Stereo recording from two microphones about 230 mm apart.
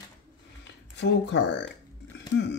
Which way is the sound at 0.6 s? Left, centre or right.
Left.